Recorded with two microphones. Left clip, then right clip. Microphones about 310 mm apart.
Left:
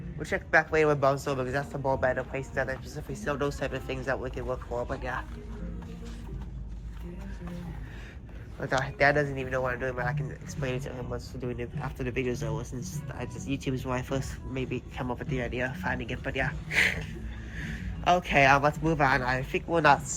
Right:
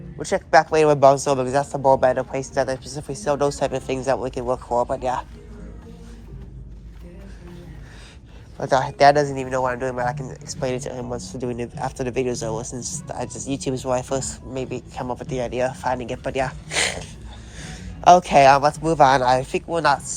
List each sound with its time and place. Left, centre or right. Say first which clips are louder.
0.2 s speech: right 9 dB; centre
8.6 s speech: right 10 dB; right; by 20.0 s centre